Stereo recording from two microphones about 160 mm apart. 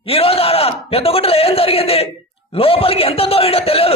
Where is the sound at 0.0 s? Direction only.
35° left (ahead or behind).